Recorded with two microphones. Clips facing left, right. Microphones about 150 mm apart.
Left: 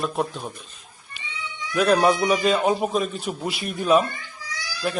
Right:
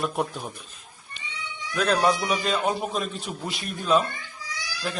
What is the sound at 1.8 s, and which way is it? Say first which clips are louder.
A man's voice: left 4 dB; 5° left (ahead or behind).